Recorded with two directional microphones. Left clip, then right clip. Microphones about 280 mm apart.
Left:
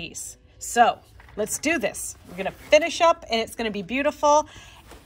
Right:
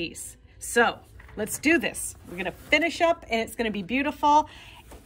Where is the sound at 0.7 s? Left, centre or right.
Centre.